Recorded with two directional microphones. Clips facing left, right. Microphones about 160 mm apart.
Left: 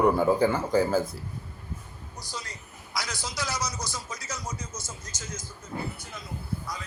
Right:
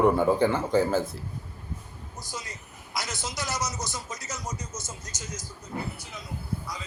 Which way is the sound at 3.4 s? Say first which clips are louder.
Even; 20° right (ahead or behind).